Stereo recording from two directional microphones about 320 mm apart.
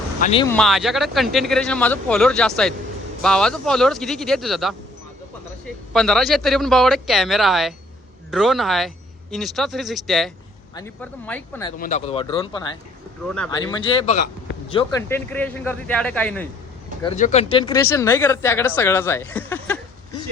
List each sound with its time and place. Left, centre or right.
0.2 s speech: centre
0.5 s speech: centre
5.9 s speech: centre
11.8 s speech: left
13.2 s speech: centre
13.5 s speech: centre
15.3 s speech: centre
17.0 s speech: centre